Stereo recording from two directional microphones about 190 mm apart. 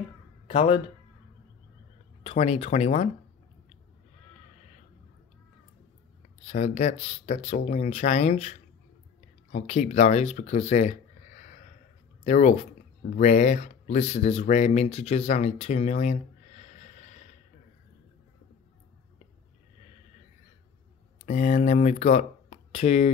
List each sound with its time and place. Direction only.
0.5 s speech: 30° left (ahead or behind)
2.2 s speech: 35° left (ahead or behind)
6.4 s speech: 35° left (ahead or behind)
21.3 s speech: 35° left (ahead or behind)